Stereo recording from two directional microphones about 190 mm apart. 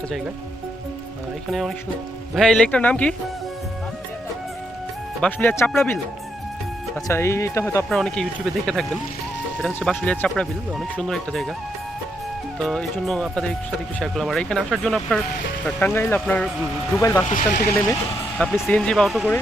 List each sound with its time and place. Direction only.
1.5 s speech: centre (ahead or behind)
5.2 s speech: 10° left (ahead or behind)
7.9 s speech: 5° left (ahead or behind)
12.5 s speech: 5° left (ahead or behind)
17.2 s speech: 50° left (ahead or behind)
18.3 s speech: centre (ahead or behind)